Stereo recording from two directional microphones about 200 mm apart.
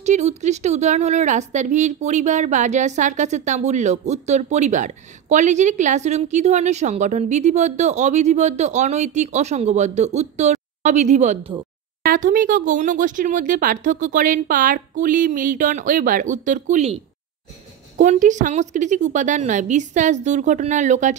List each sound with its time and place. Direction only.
0.0 s a woman's voice: 35° right (ahead or behind)